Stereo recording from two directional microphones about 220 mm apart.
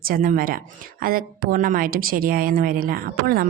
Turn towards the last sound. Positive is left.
turn(degrees=-40)  # may be behind; listen again after turning